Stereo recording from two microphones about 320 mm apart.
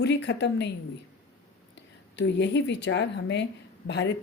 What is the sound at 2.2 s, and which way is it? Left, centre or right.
Speech, left.